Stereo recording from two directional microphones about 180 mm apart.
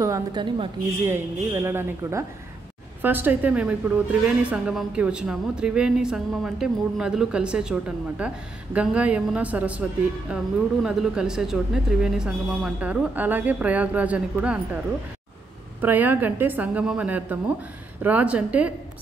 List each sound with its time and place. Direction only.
0.0 s a woman's voice: 20° right (ahead or behind)
1.0 s a woman's voice: 15° right (ahead or behind)
15.8 s a woman's voice: 10° right (ahead or behind)